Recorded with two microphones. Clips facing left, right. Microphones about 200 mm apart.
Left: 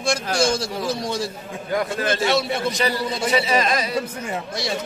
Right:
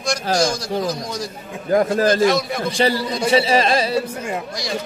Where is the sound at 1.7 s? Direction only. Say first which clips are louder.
Right 7 dB; 35° right (ahead or behind).